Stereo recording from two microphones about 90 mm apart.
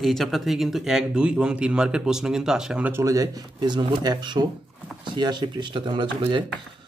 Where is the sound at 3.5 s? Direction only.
55° right (ahead or behind).